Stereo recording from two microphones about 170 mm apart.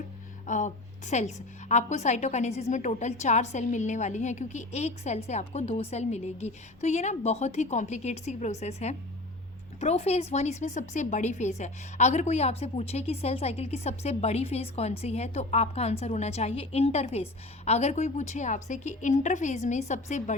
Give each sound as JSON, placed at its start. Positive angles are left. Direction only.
{"t": 0.4, "sound": "a woman's voice", "side_deg": 45}